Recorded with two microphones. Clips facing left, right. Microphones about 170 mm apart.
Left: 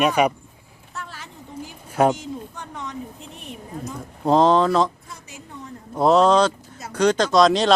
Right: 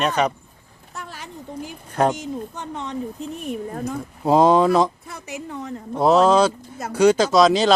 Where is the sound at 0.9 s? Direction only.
15° right (ahead or behind).